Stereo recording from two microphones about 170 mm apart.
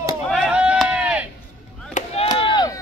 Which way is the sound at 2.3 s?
30° left (ahead or behind).